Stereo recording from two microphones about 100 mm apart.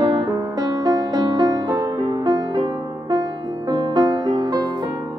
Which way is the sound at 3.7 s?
45° right (ahead or behind).